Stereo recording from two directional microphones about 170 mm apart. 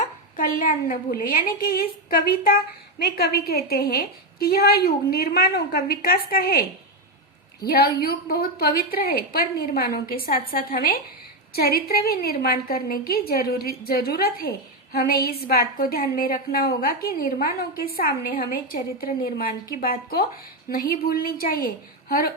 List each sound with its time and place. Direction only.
0.0 s a woman's voice: 50° left (ahead or behind)
3.0 s a woman's voice: 70° left (ahead or behind)
7.7 s a woman's voice: 65° left (ahead or behind)